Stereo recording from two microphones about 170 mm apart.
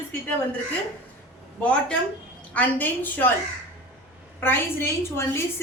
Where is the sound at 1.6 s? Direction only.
5° left (ahead or behind).